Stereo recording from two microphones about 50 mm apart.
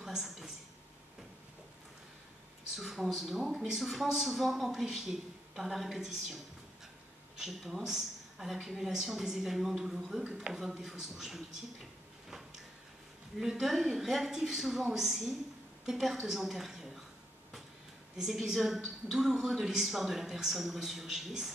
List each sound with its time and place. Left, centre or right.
0.0 s speech: centre
2.7 s a woman's voice: centre
10.4 s speech: right
10.8 s speech: centre
13.4 s a woman's voice: centre
18.1 s speech: centre